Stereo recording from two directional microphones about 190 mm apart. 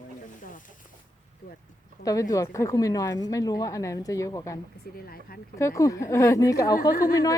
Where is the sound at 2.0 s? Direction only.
15° left (ahead or behind).